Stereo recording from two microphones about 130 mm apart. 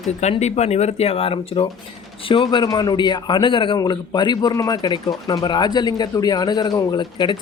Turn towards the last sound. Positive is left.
turn(degrees=35)  # may be behind; listen again after turning